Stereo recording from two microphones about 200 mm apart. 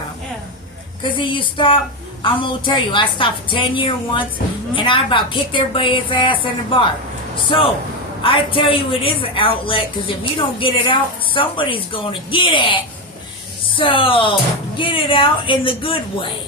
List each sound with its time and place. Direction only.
1.2 s a woman's voice: 25° left (ahead or behind)
8.2 s a woman's voice: 25° left (ahead or behind)